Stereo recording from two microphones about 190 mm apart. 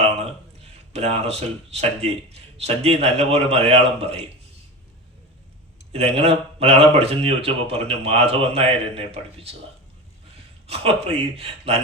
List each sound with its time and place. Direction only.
0.9 s speech: 35° right (ahead or behind)
5.9 s speech: 30° right (ahead or behind)
10.7 s speech: 30° right (ahead or behind)